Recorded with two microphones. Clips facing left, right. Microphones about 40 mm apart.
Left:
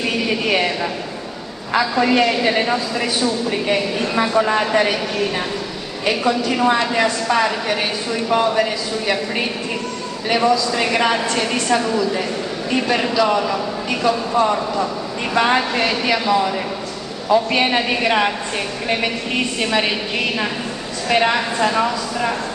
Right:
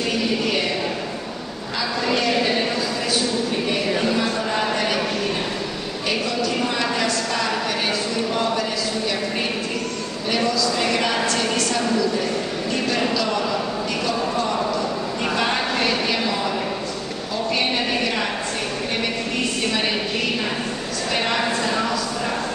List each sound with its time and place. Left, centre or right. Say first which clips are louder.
1.8 s a woman's voice: left 7 dB; left
6.0 s a woman's voice: left 5 dB; left
10.3 s a woman's voice: left 5 dB; centre
12.8 s a woman's voice: left 5 dB; centre
17.3 s a man's voice: left 8 dB; left
21.3 s a woman's voice: left 3 dB; left